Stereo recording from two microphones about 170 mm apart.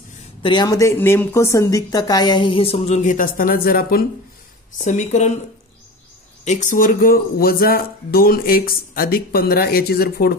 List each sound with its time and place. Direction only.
0.4 s a woman's voice: 25° left (ahead or behind); by 4.0 s 60° left (ahead or behind)
4.7 s speech: 45° left (ahead or behind)
6.4 s speech: 45° left (ahead or behind); by 10.3 s 65° left (ahead or behind)